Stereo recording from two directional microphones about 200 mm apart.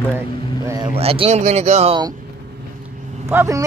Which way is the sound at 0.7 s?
15° right (ahead or behind).